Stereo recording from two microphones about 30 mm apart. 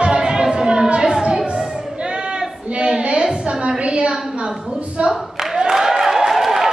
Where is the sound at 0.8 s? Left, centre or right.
Right.